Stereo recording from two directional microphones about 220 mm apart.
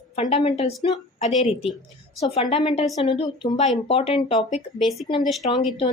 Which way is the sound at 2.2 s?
25° left (ahead or behind).